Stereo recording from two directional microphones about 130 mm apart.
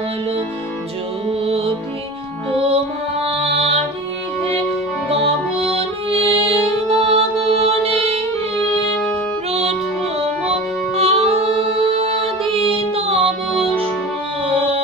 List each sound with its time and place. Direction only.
1.4 s music: 45° right (ahead or behind)
5.1 s music: 50° right (ahead or behind)
9.5 s music: 55° right (ahead or behind)
11.0 s music: 50° right (ahead or behind)